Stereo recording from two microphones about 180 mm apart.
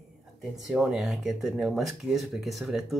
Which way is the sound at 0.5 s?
Centre (ahead or behind).